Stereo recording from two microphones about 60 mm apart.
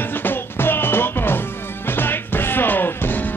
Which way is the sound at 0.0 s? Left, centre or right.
Left.